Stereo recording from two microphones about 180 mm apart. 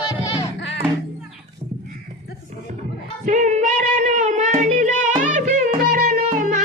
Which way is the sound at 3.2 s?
45° right (ahead or behind).